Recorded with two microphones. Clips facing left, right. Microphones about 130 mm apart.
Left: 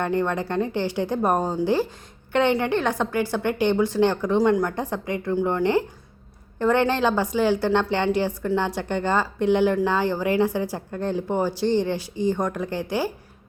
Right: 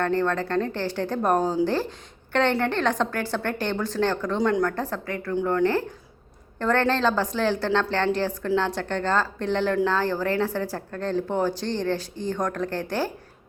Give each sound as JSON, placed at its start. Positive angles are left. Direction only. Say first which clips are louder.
{"t": 0.0, "sound": "speech", "louder": "even", "side_deg": 15}
{"t": 1.4, "sound": "a woman's voice", "louder": "right 2 dB", "side_deg": 0}
{"t": 1.6, "sound": "speech", "louder": "left 3 dB", "side_deg": 10}
{"t": 4.4, "sound": "a woman's voice", "louder": "left 4 dB", "side_deg": 0}
{"t": 4.6, "sound": "speech", "louder": "even", "side_deg": 15}
{"t": 6.6, "sound": "speech", "louder": "left 2 dB", "side_deg": 15}